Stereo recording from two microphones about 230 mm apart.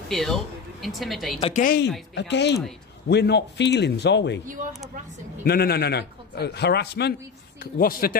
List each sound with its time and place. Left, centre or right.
0.1 s a woman's voice: centre
1.4 s speech: left
2.1 s a man's voice: left
5.4 s a man's voice: left